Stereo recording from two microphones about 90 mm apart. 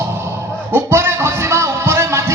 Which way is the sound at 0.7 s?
25° right (ahead or behind).